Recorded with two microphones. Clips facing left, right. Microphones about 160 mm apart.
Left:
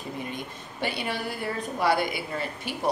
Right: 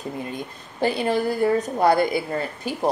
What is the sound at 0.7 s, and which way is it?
A woman's voice, 40° right (ahead or behind).